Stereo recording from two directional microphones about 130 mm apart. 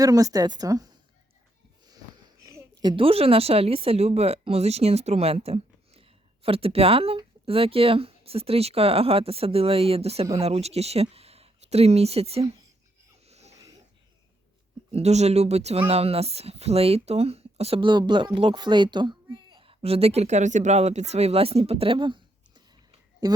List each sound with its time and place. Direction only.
0.0 s speech: 25° right (ahead or behind)
2.8 s a woman's voice: 45° right (ahead or behind)
13.2 s wheeze: 55° right (ahead or behind)
14.9 s a woman's voice: 60° right (ahead or behind)
17.7 s speech: 35° right (ahead or behind)